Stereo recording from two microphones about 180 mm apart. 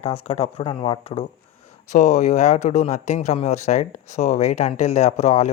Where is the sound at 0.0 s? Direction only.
35° left (ahead or behind).